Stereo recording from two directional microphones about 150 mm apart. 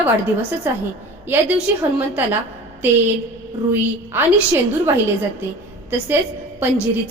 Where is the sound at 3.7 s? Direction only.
15° right (ahead or behind).